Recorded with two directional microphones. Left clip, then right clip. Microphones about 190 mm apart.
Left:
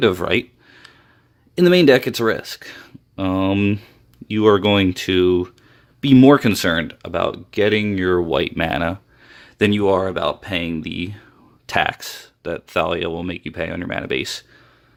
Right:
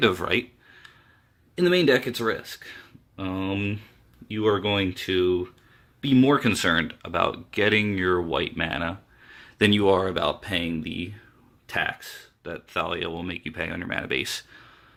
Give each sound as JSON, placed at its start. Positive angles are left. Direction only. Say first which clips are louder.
{"t": 0.0, "sound": "speech", "louder": "left 5 dB", "side_deg": 30}
{"t": 9.3, "sound": "speech", "louder": "left 3 dB", "side_deg": 20}
{"t": 11.6, "sound": "speech", "louder": "left 8 dB", "side_deg": 40}